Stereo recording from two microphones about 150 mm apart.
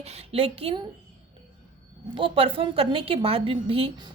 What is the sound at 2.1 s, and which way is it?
A woman's voice, 35° right (ahead or behind).